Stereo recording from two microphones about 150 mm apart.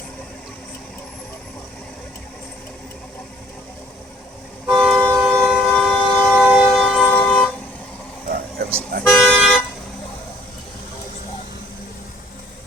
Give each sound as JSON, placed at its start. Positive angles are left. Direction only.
{"t": 4.6, "sound": "vehicle", "side_deg": 0}
{"t": 5.9, "sound": "vehicle", "side_deg": 10}
{"t": 6.3, "sound": "vehicle", "side_deg": -5}
{"t": 8.3, "sound": "music", "side_deg": -90}
{"t": 9.3, "sound": "toot", "side_deg": -5}